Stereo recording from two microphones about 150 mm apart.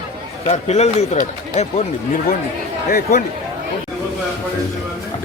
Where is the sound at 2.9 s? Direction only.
75° left (ahead or behind).